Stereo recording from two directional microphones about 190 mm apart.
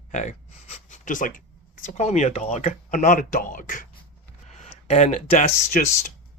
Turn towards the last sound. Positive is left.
turn(degrees=40)  # may be behind; listen again after turning